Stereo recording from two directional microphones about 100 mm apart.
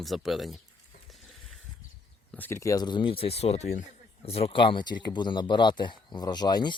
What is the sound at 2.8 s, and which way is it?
Speech, 50° left (ahead or behind).